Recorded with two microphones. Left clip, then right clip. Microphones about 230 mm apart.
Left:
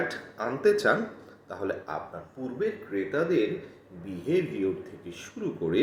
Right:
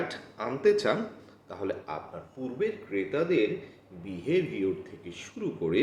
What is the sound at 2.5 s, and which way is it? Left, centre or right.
Speech, right.